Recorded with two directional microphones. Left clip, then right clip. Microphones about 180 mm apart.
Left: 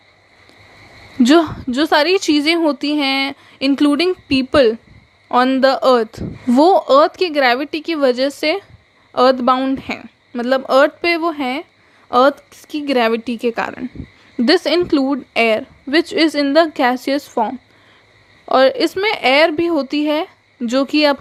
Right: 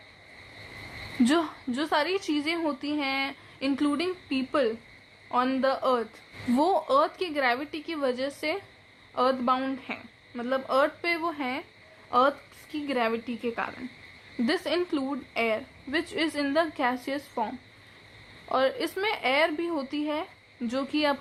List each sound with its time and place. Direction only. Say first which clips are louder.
1.2 s a woman's voice: left 13 dB; 40° left (ahead or behind)
9.8 s a woman's voice: left 11 dB; 50° left (ahead or behind)